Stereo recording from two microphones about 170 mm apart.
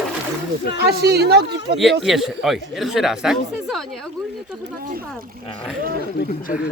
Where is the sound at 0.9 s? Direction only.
75° right (ahead or behind).